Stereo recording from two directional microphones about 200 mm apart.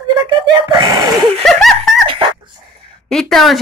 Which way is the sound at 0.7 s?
20° right (ahead or behind).